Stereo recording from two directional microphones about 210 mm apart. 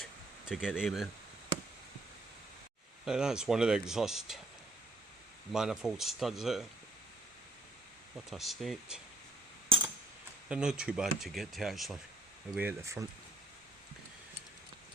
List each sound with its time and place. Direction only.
0.0 s a sound: centre (ahead or behind)
3.0 s speech: 5° right (ahead or behind)
5.5 s speech: centre (ahead or behind)
8.3 s speech: centre (ahead or behind)
9.6 s a sound: 25° right (ahead or behind)
10.5 s speech: 5° right (ahead or behind)
12.5 s speech: 10° right (ahead or behind)